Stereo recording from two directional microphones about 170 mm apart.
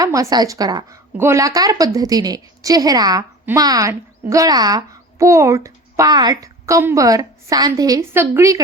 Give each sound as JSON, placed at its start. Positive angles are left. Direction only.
{"t": 0.0, "sound": "a woman's voice", "side_deg": -20}